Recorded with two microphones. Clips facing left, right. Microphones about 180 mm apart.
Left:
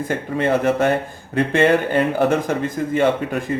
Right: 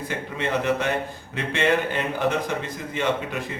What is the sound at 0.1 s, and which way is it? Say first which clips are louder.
Speech: left 7 dB; 50° left (ahead or behind).